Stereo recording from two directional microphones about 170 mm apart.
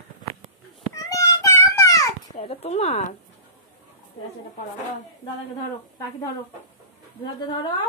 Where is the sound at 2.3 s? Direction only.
35° left (ahead or behind).